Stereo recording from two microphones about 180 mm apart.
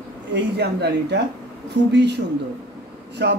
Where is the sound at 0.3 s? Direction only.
70° right (ahead or behind).